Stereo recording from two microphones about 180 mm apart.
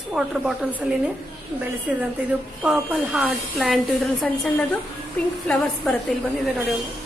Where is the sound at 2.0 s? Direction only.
5° right (ahead or behind).